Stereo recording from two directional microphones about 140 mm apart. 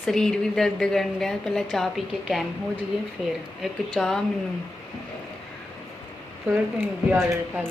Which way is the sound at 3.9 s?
5° left (ahead or behind).